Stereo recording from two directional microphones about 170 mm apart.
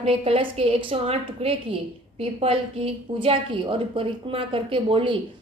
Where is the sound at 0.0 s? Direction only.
35° right (ahead or behind).